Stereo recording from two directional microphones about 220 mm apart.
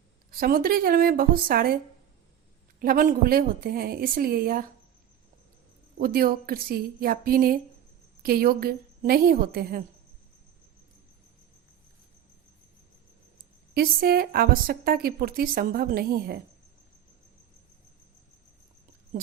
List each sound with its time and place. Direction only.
0.3 s a woman's voice: 40° right (ahead or behind)
6.0 s a woman's voice: 40° right (ahead or behind)
13.7 s a woman's voice: 45° right (ahead or behind)